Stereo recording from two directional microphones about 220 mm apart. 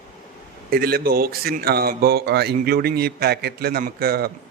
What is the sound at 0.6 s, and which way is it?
A man's voice, 40° right (ahead or behind).